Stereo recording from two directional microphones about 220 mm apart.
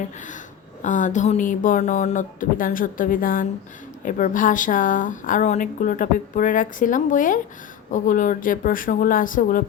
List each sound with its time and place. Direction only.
0.8 s speech: 35° left (ahead or behind)